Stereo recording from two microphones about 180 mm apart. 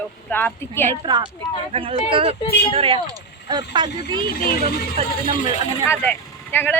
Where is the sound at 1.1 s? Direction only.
25° right (ahead or behind).